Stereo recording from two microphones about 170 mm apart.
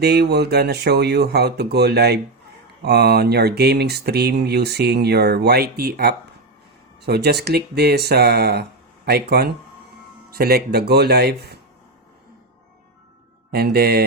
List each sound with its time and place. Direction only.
0.0 s speech: 70° right (ahead or behind)
13.5 s speech: 70° right (ahead or behind)